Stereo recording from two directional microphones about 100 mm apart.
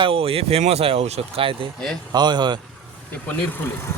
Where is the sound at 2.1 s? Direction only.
50° right (ahead or behind).